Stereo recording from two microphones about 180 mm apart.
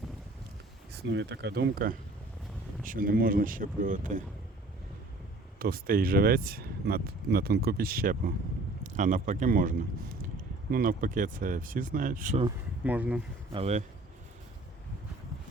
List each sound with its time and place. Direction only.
0.9 s speech: 80° right; by 4.2 s 45° right (ahead or behind)
5.5 s a man's voice: 55° right (ahead or behind)
12.8 s speech: 10° right (ahead or behind)
13.5 s speech: 35° right (ahead or behind)